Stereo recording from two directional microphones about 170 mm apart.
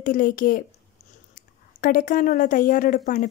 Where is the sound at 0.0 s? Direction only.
50° left (ahead or behind).